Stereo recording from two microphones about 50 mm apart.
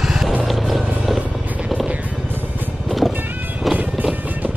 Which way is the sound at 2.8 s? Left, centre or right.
Centre.